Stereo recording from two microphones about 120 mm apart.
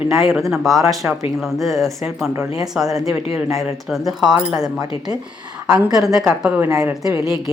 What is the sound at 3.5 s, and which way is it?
Speech, centre (ahead or behind).